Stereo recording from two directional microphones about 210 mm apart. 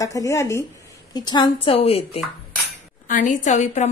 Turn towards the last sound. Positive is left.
turn(degrees=35)  # may be behind; listen again after turning